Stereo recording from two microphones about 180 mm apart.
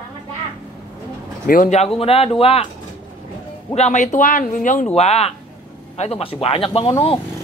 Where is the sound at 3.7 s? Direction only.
40° left (ahead or behind).